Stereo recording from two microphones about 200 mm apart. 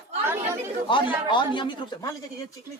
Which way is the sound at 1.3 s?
25° left (ahead or behind).